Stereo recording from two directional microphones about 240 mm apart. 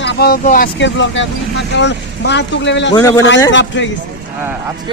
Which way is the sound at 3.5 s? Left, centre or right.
Left.